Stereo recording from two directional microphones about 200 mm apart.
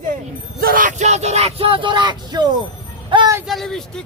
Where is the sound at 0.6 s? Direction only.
45° right (ahead or behind); by 3.3 s 25° right (ahead or behind).